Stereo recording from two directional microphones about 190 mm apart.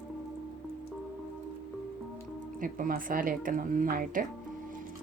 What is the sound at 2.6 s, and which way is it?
Speech, 45° right (ahead or behind).